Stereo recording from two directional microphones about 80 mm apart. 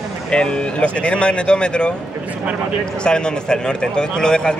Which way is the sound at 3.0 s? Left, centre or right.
Centre.